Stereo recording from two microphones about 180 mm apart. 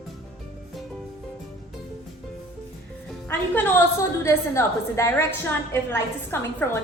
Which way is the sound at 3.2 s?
10° left (ahead or behind).